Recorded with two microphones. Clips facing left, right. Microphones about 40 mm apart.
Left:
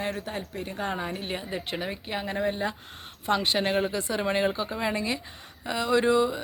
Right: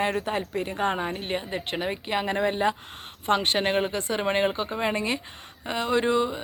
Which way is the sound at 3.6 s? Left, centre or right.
Right.